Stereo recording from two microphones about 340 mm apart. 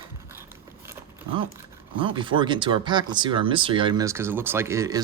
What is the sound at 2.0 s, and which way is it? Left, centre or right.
Speech, centre.